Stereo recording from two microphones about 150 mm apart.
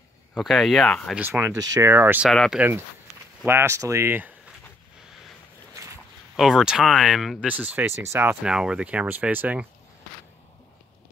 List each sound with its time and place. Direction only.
0.4 s speech: centre (ahead or behind)
1.1 s speech: 10° right (ahead or behind)
2.2 s speech: centre (ahead or behind)
3.4 s speech: 15° right (ahead or behind)
6.3 s speech: 5° right (ahead or behind)
8.4 s speech: 5° right (ahead or behind)